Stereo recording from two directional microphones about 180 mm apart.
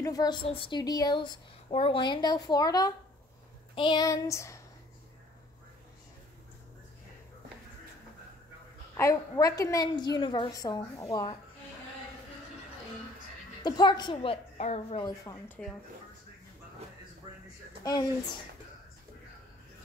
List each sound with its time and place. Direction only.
0.0 s a woman's voice: 20° left (ahead or behind)
8.9 s a woman's voice: 15° left (ahead or behind)
13.6 s a woman's voice: 25° left (ahead or behind)
15.0 s speech: 20° left (ahead or behind)